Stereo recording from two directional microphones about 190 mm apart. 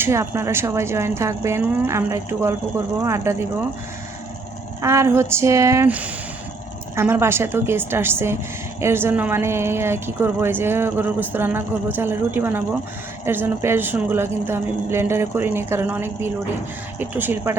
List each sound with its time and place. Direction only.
0.0 s a woman's voice: 15° right (ahead or behind)
4.8 s a woman's voice: 15° right (ahead or behind)